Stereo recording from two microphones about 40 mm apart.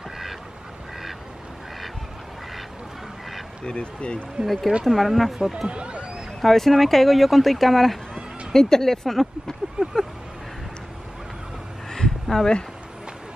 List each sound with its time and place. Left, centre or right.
3.6 s speech: left
4.5 s speech: centre
5.4 s speech: centre
5.7 s speech: right
6.4 s speech: centre
8.5 s speech: centre
11.9 s a sound: centre